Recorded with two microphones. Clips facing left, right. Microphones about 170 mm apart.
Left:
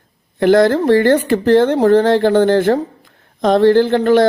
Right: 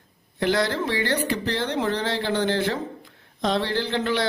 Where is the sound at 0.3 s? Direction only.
50° left (ahead or behind).